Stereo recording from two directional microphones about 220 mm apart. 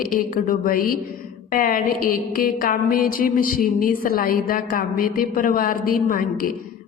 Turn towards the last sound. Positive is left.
turn(degrees=40)  # may be behind; listen again after turning